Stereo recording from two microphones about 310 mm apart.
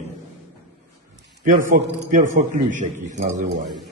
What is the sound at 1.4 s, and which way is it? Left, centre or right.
A man's voice, right.